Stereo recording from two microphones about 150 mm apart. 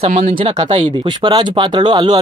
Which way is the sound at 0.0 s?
50° right (ahead or behind).